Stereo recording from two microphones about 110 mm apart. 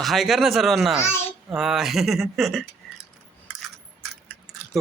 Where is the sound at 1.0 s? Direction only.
20° left (ahead or behind).